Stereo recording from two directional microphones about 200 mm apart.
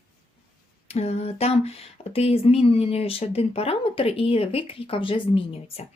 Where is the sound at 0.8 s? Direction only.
30° left (ahead or behind).